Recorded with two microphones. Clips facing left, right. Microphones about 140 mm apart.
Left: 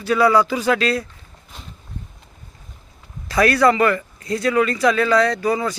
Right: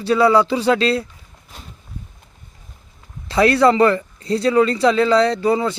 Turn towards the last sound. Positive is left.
turn(degrees=-25)  # may be behind; listen again after turning